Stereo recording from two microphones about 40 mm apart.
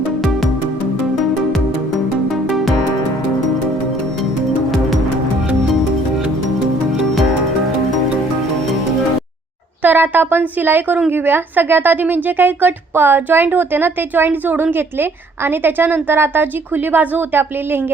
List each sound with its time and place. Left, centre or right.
9.8 s a woman's voice: right
11.1 s a woman's voice: right
14.4 s a woman's voice: right